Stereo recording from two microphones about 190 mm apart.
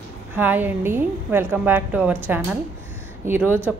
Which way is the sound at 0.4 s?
10° right (ahead or behind).